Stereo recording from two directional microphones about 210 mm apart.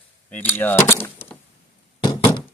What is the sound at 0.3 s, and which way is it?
Speech, 10° left (ahead or behind).